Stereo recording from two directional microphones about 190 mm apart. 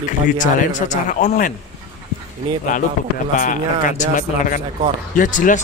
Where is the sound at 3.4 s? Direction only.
45° left (ahead or behind).